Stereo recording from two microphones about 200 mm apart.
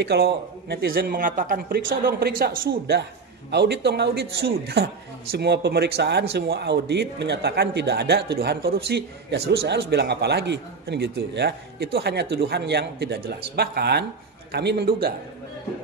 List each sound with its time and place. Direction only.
0.0 s a man's voice: 55° right (ahead or behind)